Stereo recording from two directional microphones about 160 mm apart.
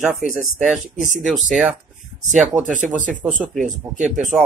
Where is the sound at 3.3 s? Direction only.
50° right (ahead or behind).